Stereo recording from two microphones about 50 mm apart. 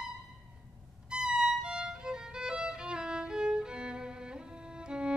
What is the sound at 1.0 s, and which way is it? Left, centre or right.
Violin, centre.